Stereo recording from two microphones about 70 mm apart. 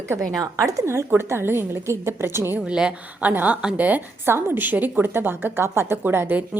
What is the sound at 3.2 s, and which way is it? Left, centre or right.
A woman's voice, right.